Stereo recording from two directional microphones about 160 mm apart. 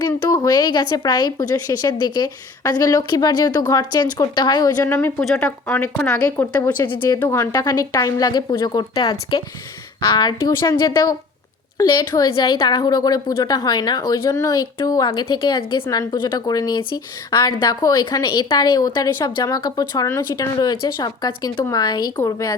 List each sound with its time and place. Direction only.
0.0 s speech: 20° left (ahead or behind)
5.2 s speech: 5° left (ahead or behind); by 9.1 s 25° left (ahead or behind)
10.2 s speech: 25° left (ahead or behind)